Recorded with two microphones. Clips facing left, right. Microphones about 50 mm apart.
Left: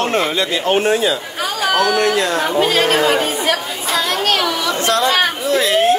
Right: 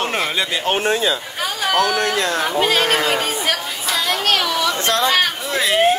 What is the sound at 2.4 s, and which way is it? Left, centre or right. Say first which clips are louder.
Speech: left 2 dB; centre.